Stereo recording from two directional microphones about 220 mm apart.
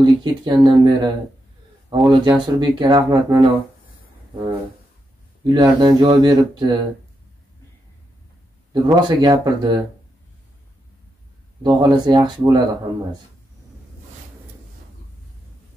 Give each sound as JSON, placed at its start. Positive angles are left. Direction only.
{"t": 0.0, "sound": "speech", "side_deg": -20}
{"t": 5.4, "sound": "speech", "side_deg": -20}
{"t": 8.8, "sound": "speech", "side_deg": -15}
{"t": 11.6, "sound": "speech", "side_deg": -20}